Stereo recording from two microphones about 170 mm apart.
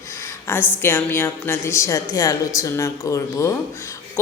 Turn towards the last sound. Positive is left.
turn(degrees=20)  # may be behind; listen again after turning